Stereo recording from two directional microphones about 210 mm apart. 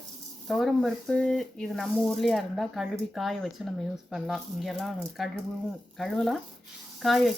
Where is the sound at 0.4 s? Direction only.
Centre (ahead or behind).